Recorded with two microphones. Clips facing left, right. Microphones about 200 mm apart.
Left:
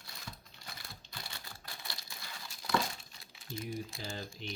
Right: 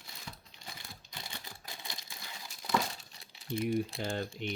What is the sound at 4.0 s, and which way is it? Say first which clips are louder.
Speech: right 7 dB; 60° right (ahead or behind).